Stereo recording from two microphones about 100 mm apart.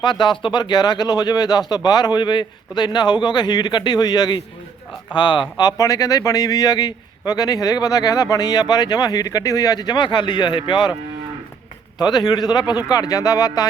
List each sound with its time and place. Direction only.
0.0 s speech: 50° left (ahead or behind)
11.9 s speech: 45° left (ahead or behind)